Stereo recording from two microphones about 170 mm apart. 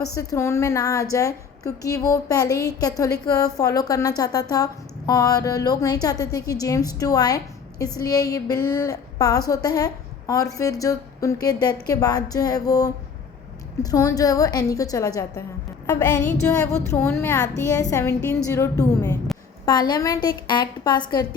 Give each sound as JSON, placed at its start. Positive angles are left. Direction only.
{"t": 0.2, "sound": "a woman's voice", "side_deg": 20}
{"t": 16.0, "sound": "music", "side_deg": 15}
{"t": 18.4, "sound": "a woman's voice", "side_deg": 20}